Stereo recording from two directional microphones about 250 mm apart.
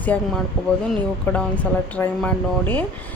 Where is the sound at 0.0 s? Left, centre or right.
Centre.